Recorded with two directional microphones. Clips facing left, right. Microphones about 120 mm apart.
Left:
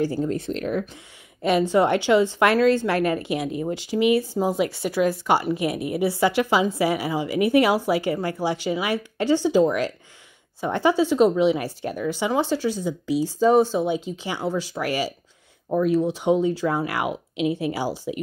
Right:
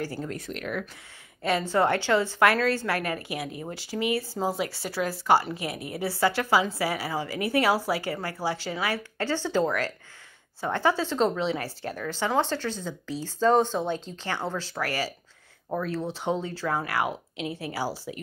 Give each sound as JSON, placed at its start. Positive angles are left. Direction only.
{"t": 0.0, "sound": "speech", "side_deg": 20}
{"t": 1.4, "sound": "speech", "side_deg": 15}